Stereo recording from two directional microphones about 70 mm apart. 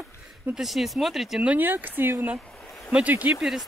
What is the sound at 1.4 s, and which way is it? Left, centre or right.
Speech, right.